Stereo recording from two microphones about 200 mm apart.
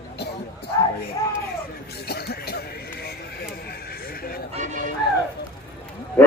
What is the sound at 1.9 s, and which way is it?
Music, 55° left (ahead or behind).